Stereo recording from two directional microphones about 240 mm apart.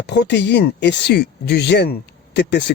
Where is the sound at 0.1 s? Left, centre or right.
Left.